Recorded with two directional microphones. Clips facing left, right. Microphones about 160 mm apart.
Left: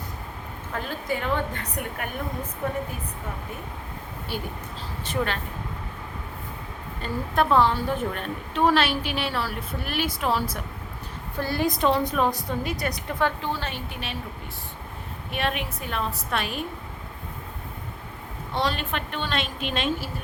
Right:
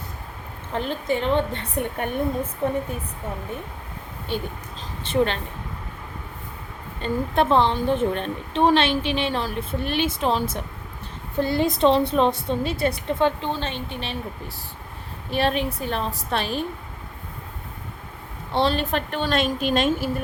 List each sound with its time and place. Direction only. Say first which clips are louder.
0.7 s a woman's voice: right 5 dB; 25° right (ahead or behind)
5.0 s a woman's voice: right 6 dB; 25° right (ahead or behind)
7.0 s a woman's voice: right 3 dB; 25° right (ahead or behind)
15.3 s a woman's voice: right 6 dB; 30° right (ahead or behind)
18.5 s a woman's voice: right 5 dB; 30° right (ahead or behind)